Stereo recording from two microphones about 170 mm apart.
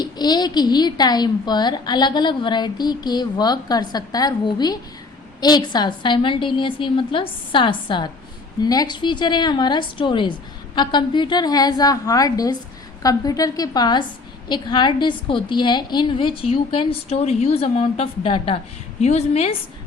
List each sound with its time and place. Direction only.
0.0 s a woman's voice: 25° left (ahead or behind)